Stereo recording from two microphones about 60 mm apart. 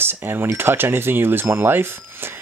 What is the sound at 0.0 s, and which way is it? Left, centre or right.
Speech, right.